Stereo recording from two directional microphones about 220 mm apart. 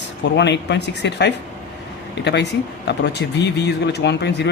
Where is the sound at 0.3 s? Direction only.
50° left (ahead or behind).